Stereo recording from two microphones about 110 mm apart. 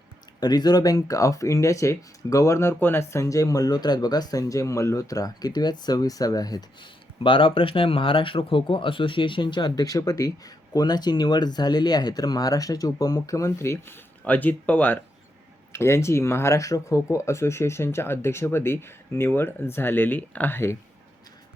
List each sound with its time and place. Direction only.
0.3 s speech: 40° left (ahead or behind)
7.2 s speech: 55° left (ahead or behind); by 20.7 s 20° left (ahead or behind)